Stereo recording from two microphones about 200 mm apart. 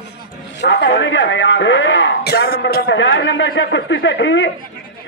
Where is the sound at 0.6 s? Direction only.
60° left (ahead or behind).